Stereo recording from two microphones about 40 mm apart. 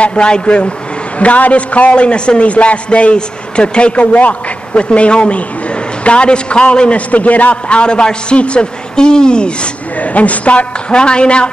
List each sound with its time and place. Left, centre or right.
0.0 s a man's voice: left
7.1 s a man's voice: left
9.9 s a man's voice: left